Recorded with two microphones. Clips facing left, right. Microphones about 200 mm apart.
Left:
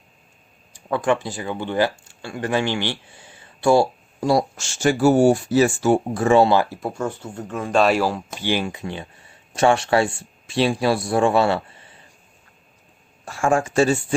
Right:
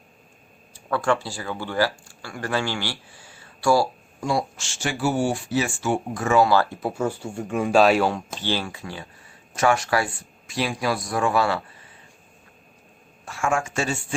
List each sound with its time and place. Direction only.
0.7 s speech: 20° left (ahead or behind)
4.2 s speech: 40° left (ahead or behind)
6.7 s speech: centre (ahead or behind)
8.4 s speech: 15° left (ahead or behind)
13.2 s speech: 35° left (ahead or behind)